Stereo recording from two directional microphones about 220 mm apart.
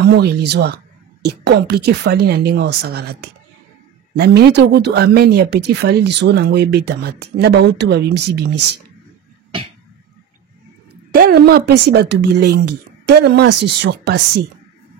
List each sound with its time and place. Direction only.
0.1 s speech: 50° right (ahead or behind)
11.1 s speech: 45° right (ahead or behind)